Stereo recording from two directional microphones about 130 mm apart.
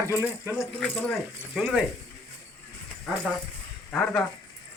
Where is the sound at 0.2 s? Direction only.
15° right (ahead or behind).